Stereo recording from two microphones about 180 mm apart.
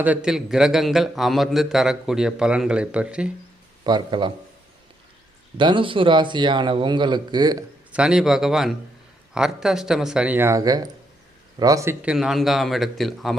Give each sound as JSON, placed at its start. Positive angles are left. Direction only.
{"t": 0.0, "sound": "a man's voice", "side_deg": -5}
{"t": 3.8, "sound": "a man's voice", "side_deg": -25}
{"t": 5.5, "sound": "a man's voice", "side_deg": -25}
{"t": 7.9, "sound": "a man's voice", "side_deg": -5}
{"t": 12.0, "sound": "a man's voice", "side_deg": 0}